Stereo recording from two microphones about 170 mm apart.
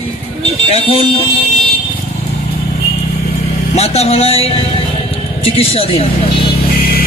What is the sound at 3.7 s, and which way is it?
Speech, 40° left (ahead or behind).